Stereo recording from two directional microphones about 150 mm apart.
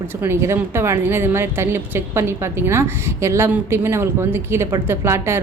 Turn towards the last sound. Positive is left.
turn(degrees=-15)  # may be behind; listen again after turning